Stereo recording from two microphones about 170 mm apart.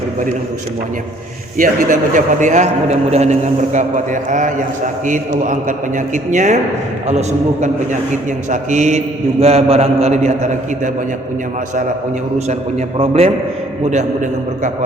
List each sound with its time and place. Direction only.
1.5 s a man's voice: 55° right (ahead or behind)
13.0 s a man's voice: 35° right (ahead or behind)